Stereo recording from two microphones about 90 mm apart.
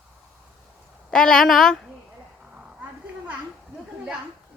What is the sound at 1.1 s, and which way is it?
Speech, 5° left (ahead or behind).